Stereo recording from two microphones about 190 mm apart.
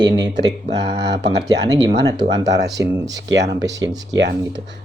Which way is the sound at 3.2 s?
65° right (ahead or behind).